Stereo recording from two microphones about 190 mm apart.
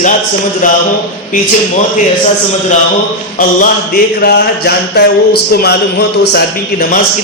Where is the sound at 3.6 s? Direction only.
50° left (ahead or behind).